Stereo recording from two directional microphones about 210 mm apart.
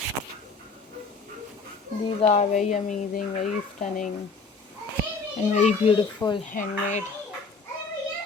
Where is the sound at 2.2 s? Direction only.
30° left (ahead or behind).